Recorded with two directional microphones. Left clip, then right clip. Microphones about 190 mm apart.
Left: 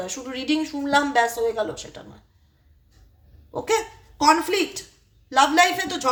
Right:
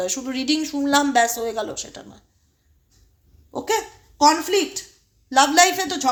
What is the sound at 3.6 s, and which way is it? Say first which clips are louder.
A woman's voice: even; 30° right (ahead or behind).